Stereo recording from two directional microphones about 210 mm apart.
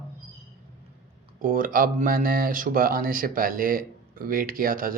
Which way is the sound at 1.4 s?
40° right (ahead or behind).